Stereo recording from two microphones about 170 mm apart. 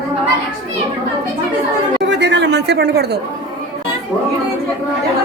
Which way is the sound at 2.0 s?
90° right.